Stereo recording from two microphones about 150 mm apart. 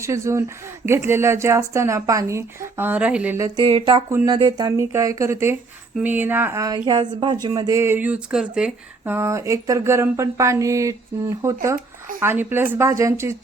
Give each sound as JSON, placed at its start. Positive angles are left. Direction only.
{"t": 0.0, "sound": "speech", "side_deg": -20}
{"t": 3.3, "sound": "speech", "side_deg": -25}
{"t": 6.8, "sound": "speech", "side_deg": -30}
{"t": 9.1, "sound": "speech", "side_deg": -20}